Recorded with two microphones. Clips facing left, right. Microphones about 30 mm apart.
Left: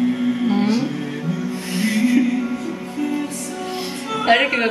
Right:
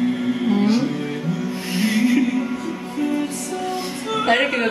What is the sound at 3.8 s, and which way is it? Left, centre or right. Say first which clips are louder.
Music: right 1 dB; centre.